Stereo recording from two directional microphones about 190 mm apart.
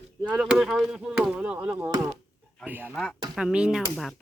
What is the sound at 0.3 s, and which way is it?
Speech, centre (ahead or behind).